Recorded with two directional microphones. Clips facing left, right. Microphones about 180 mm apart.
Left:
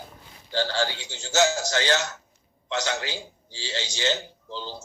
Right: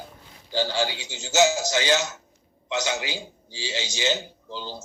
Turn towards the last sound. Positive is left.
turn(degrees=-15)  # may be behind; listen again after turning